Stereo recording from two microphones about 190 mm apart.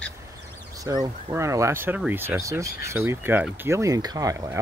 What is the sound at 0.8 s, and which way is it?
Speech, 20° right (ahead or behind).